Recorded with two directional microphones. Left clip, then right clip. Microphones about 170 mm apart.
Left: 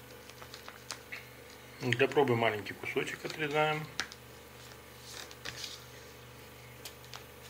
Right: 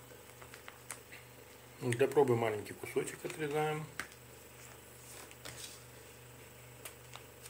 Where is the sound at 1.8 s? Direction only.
20° right (ahead or behind).